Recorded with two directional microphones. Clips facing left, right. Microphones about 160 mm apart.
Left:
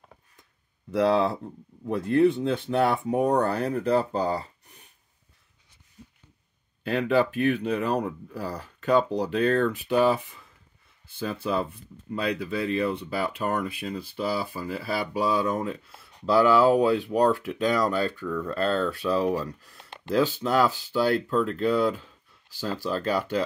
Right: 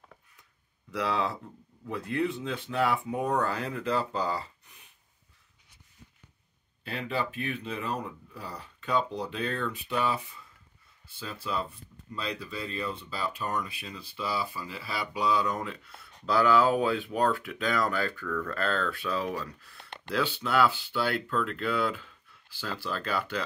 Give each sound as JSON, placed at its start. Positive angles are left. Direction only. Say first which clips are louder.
{"t": 2.4, "sound": "speech", "louder": "left 8 dB", "side_deg": 70}
{"t": 2.8, "sound": "speech", "louder": "left 4 dB", "side_deg": 40}
{"t": 6.8, "sound": "speech", "louder": "left 10 dB", "side_deg": 60}
{"t": 9.8, "sound": "speech", "louder": "left 6 dB", "side_deg": 60}
{"t": 18.2, "sound": "speech", "louder": "left 3 dB", "side_deg": 20}
{"t": 18.5, "sound": "speech", "louder": "left 7 dB", "side_deg": 35}